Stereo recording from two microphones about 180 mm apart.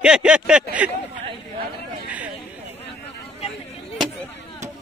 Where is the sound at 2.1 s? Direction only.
10° right (ahead or behind).